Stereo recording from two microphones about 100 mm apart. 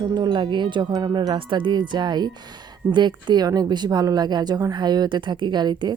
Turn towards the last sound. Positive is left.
turn(degrees=-45)  # may be behind; listen again after turning